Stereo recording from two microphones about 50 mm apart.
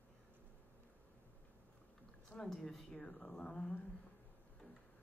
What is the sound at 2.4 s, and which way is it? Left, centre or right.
Speech, centre.